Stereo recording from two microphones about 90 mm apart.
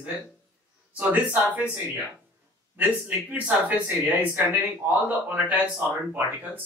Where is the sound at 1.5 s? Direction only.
15° right (ahead or behind).